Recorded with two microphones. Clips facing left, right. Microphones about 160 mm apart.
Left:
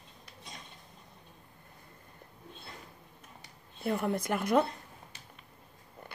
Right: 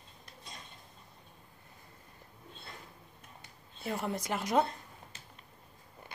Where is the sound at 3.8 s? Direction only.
55° left (ahead or behind).